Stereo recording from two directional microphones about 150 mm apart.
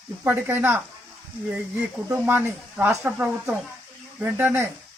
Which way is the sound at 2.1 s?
15° right (ahead or behind).